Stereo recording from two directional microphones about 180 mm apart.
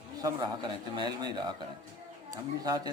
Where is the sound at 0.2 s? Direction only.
20° right (ahead or behind).